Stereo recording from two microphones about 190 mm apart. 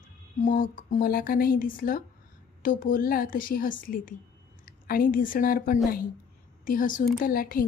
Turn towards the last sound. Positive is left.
turn(degrees=50)  # may be behind; listen again after turning